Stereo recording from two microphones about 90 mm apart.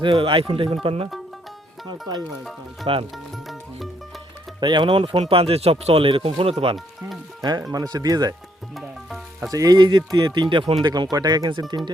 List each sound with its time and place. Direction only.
0.0 s speech: 75° right (ahead or behind)
1.9 s speech: 50° right (ahead or behind)
2.8 s speech: 90° right
3.3 s music: centre (ahead or behind)
4.6 s speech: 60° right (ahead or behind); by 6.7 s 90° right
7.7 s speech: 45° right (ahead or behind)
8.7 s sizzle: centre (ahead or behind)
9.5 s speech: 40° right (ahead or behind)
9.8 s speech: 55° right (ahead or behind)